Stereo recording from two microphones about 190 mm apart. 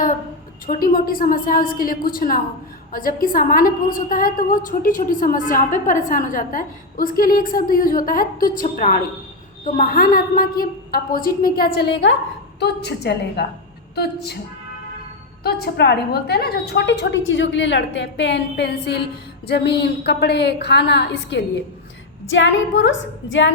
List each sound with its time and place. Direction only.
0.7 s a woman's voice: 50° left (ahead or behind)
15.4 s a woman's voice: 55° left (ahead or behind)
22.3 s a woman's voice: 75° left (ahead or behind)